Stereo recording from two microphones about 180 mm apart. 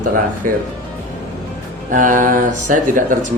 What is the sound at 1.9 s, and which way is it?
Speech, 45° right (ahead or behind).